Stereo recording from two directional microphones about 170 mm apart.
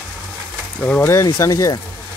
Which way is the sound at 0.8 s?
10° left (ahead or behind).